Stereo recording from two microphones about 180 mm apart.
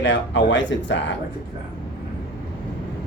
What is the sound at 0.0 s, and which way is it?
Speech, 90° left.